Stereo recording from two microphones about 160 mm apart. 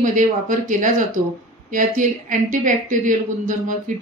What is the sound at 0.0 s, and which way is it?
Speech, 55° right (ahead or behind).